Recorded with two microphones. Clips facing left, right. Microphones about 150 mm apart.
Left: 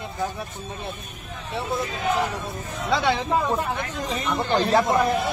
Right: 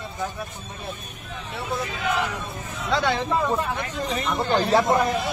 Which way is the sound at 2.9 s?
5° left (ahead or behind).